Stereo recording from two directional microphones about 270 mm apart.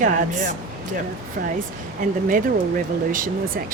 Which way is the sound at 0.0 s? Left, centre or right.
Right.